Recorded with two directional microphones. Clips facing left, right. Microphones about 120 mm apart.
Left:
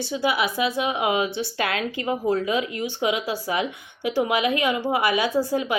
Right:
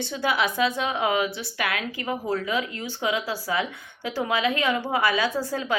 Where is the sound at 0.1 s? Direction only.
10° left (ahead or behind).